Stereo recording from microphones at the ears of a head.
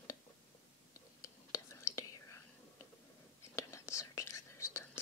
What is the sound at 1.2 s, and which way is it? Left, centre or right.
Whispering, left.